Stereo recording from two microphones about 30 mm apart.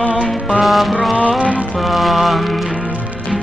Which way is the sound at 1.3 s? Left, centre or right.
Right.